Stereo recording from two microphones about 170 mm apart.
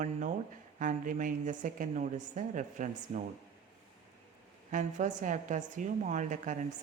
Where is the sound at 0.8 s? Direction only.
50° right (ahead or behind).